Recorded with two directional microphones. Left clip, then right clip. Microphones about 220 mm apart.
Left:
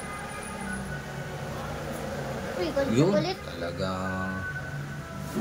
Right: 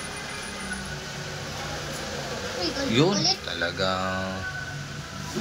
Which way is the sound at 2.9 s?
5° left (ahead or behind).